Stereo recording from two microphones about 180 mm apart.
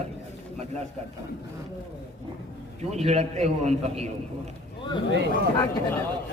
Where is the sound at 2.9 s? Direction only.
35° right (ahead or behind).